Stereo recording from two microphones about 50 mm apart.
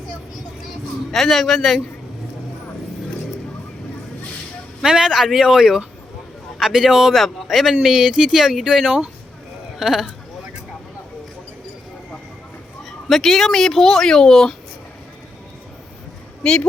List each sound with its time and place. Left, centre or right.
1.1 s speech: centre
4.8 s speech: centre
12.8 s speech: centre
16.4 s speech: centre